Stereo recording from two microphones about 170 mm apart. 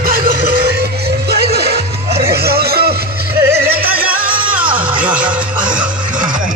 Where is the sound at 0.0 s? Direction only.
60° right (ahead or behind).